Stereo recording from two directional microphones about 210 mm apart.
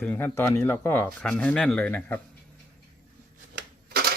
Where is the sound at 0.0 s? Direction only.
10° left (ahead or behind).